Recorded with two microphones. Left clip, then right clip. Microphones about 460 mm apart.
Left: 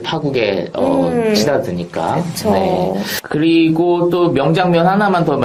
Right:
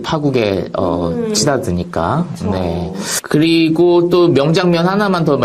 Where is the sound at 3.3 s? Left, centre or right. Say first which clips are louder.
Even; right.